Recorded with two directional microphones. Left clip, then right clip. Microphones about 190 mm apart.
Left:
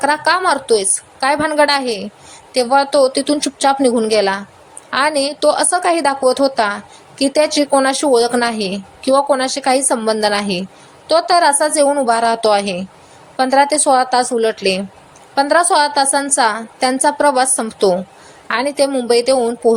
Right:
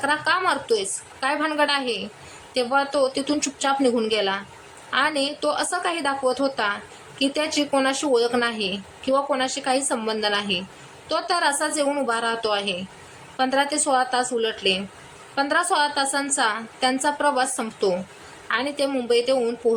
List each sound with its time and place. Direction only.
0.0 s speech: 25° left (ahead or behind)